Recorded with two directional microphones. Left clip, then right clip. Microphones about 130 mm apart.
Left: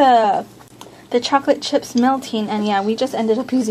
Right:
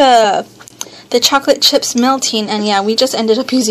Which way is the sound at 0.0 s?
10° right (ahead or behind).